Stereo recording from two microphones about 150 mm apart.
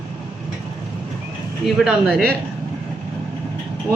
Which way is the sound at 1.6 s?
Centre (ahead or behind).